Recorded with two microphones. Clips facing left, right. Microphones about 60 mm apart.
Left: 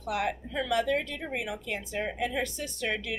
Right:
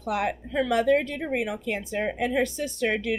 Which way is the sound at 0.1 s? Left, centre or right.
Right.